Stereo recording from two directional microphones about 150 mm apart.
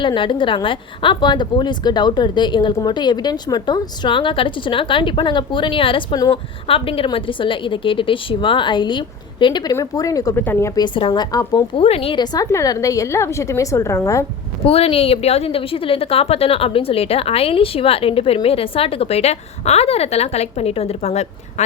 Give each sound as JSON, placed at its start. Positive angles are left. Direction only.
{"t": 0.0, "sound": "a woman's voice", "side_deg": 35}
{"t": 10.8, "sound": "a woman's voice", "side_deg": 30}
{"t": 11.8, "sound": "a woman's voice", "side_deg": 40}
{"t": 14.6, "sound": "a woman's voice", "side_deg": 40}